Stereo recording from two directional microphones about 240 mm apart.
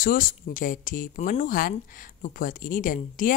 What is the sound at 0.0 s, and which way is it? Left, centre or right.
A woman's voice, left.